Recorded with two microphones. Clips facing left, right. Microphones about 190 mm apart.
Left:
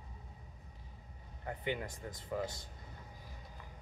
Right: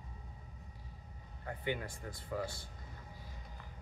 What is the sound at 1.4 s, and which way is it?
Speech, 20° left (ahead or behind).